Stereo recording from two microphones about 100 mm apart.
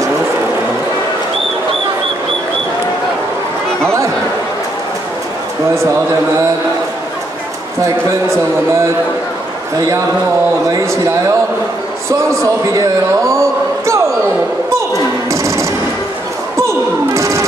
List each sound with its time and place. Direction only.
12.1 s a man's voice: 30° right (ahead or behind)
13.3 s a sound: 30° right (ahead or behind)
15.3 s music: 30° right (ahead or behind)